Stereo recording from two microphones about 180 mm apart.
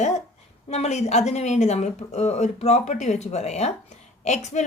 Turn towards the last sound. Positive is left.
turn(degrees=40)  # may be behind; listen again after turning